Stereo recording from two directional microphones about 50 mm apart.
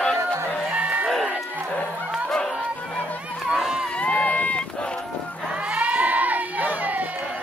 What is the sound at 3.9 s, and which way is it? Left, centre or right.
Run, left.